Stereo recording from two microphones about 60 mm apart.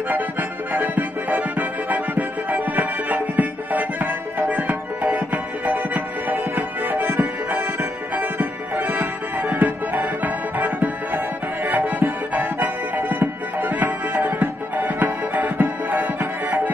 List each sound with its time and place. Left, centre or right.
0.1 s music: right